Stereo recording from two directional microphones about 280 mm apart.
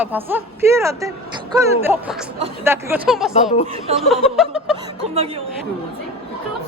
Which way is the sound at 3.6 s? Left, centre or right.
Right.